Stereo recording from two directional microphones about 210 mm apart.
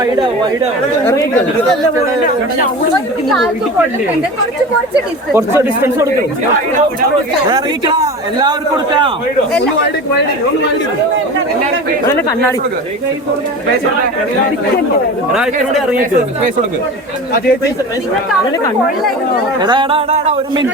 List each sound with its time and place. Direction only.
3.2 s speech: centre (ahead or behind)
5.3 s speech: 10° right (ahead or behind)
7.5 s speech: 20° right (ahead or behind)
15.3 s speech: centre (ahead or behind)
19.6 s speech: 25° right (ahead or behind)